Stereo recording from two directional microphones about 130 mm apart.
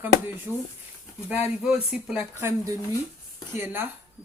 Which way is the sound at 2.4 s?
20° right (ahead or behind).